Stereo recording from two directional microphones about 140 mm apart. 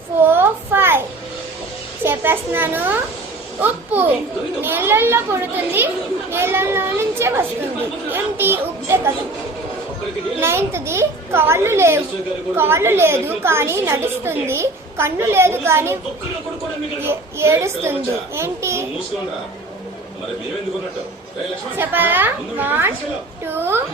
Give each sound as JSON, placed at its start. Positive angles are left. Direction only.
{"t": 0.2, "sound": "a sound", "side_deg": -15}
{"t": 2.0, "sound": "a child's voice", "side_deg": -15}
{"t": 10.4, "sound": "a child's voice", "side_deg": -20}
{"t": 17.0, "sound": "a woman's voice", "side_deg": -20}
{"t": 21.8, "sound": "a woman's voice", "side_deg": -15}